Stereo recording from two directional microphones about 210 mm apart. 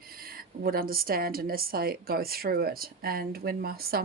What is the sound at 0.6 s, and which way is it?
A woman's voice, 45° right (ahead or behind).